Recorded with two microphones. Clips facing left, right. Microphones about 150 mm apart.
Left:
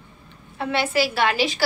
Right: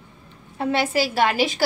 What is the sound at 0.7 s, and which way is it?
Speech, 45° right (ahead or behind).